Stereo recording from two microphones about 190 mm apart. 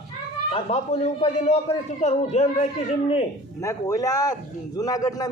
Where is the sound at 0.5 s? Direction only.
30° left (ahead or behind).